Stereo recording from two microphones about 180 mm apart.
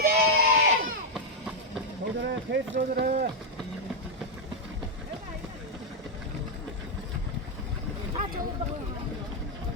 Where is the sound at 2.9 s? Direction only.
60° right (ahead or behind).